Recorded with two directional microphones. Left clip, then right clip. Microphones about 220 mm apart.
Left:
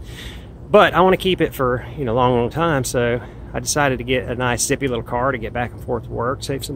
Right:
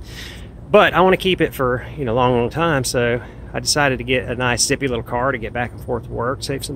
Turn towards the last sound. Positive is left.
turn(degrees=0)  # may be behind; listen again after turning